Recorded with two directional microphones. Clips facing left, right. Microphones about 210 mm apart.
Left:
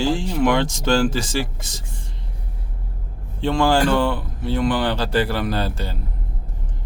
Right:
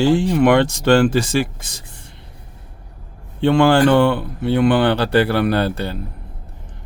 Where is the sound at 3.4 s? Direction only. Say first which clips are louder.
Right 5 dB; 65° right (ahead or behind).